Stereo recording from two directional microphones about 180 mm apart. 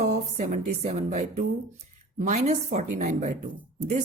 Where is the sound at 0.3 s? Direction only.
35° right (ahead or behind).